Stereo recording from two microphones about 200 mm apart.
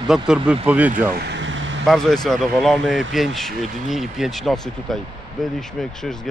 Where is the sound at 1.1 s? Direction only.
60° right (ahead or behind).